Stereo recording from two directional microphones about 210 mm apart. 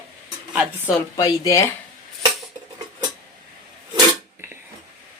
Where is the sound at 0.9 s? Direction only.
15° left (ahead or behind).